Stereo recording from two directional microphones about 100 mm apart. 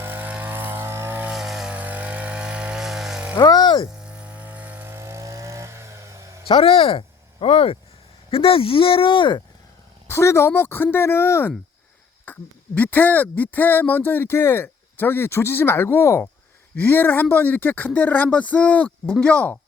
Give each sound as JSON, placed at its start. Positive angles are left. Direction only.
{"t": 0.0, "sound": "vehicle", "side_deg": -20}
{"t": 1.3, "sound": "a sound", "side_deg": -5}
{"t": 1.7, "sound": "vehicle", "side_deg": -15}
{"t": 3.3, "sound": "a sound", "side_deg": 45}
{"t": 4.0, "sound": "chainsaw", "side_deg": -15}
{"t": 6.5, "sound": "speech", "side_deg": 65}
{"t": 10.1, "sound": "speech", "side_deg": 25}